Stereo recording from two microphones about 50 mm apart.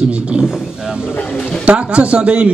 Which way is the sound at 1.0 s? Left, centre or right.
Left.